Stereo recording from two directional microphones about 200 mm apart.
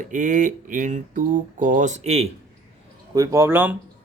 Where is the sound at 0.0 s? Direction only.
40° right (ahead or behind).